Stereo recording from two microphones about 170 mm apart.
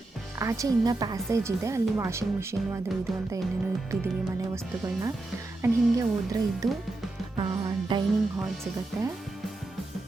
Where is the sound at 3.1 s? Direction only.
Centre (ahead or behind).